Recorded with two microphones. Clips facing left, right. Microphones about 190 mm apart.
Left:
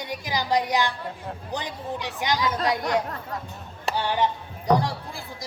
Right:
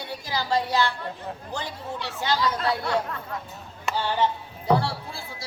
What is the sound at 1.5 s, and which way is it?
Speech, 15° left (ahead or behind).